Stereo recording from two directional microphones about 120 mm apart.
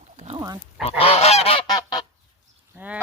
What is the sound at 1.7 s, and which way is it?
Goose, 35° left (ahead or behind).